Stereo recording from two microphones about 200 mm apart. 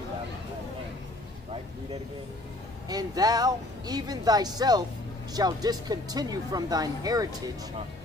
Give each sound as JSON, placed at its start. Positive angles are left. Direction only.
{"t": 2.9, "sound": "speech", "side_deg": -20}